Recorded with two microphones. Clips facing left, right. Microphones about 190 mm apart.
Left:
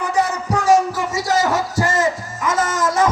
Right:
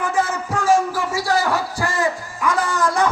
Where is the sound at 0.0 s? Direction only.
15° left (ahead or behind).